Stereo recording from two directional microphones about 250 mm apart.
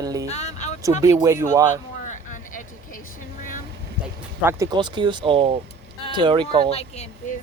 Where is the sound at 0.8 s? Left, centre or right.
Centre.